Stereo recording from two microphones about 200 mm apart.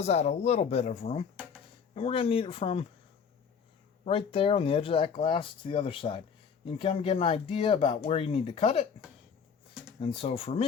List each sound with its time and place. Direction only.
0.0 s speech: 35° left (ahead or behind)
4.0 s speech: 25° left (ahead or behind)
10.0 s speech: 25° left (ahead or behind)